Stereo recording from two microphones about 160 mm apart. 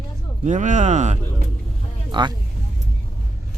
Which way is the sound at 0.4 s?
50° right (ahead or behind).